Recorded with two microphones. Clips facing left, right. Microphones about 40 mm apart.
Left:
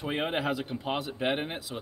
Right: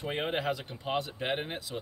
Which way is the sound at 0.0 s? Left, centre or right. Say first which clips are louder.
Left 2 dB; centre.